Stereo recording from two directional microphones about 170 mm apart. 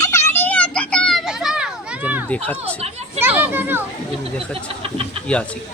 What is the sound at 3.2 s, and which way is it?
Speech, 10° right (ahead or behind).